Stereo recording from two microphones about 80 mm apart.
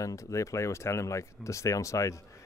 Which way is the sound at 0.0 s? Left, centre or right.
Left.